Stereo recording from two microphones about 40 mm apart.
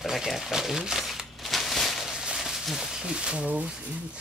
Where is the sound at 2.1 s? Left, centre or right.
Centre.